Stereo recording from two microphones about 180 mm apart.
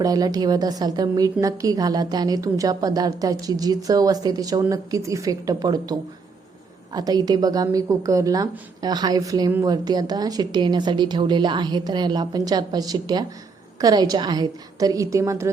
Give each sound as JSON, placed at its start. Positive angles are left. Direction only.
{"t": 0.0, "sound": "a woman's voice", "side_deg": -20}